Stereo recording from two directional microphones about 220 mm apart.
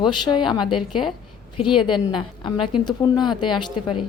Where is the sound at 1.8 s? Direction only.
20° left (ahead or behind).